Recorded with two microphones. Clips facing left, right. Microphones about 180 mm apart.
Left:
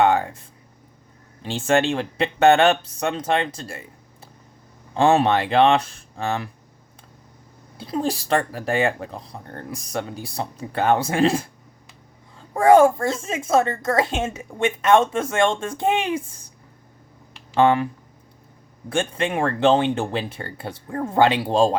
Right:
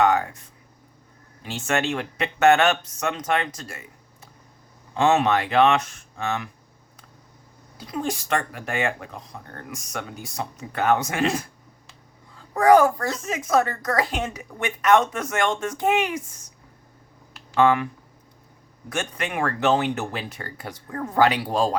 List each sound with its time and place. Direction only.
0.0 s speech: 30° left (ahead or behind)
7.8 s speech: 30° left (ahead or behind)
17.5 s speech: 30° left (ahead or behind)
18.9 s speech: 30° left (ahead or behind)